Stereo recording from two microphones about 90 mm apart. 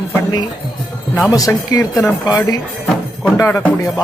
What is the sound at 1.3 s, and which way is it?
Speech, 40° left (ahead or behind).